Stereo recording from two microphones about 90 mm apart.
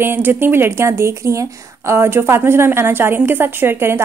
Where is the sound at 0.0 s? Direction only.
25° right (ahead or behind).